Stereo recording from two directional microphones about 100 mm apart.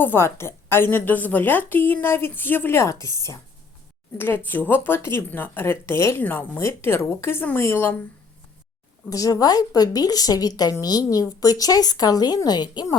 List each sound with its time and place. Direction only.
0.0 s a woman's voice: 25° left (ahead or behind)
4.2 s a woman's voice: 20° left (ahead or behind)
9.0 s a woman's voice: 35° left (ahead or behind)